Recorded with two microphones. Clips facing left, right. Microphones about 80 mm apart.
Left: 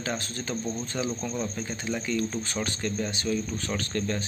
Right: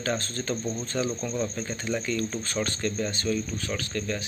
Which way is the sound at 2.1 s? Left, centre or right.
Centre.